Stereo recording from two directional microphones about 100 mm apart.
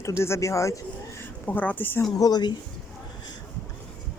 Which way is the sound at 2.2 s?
40° left (ahead or behind).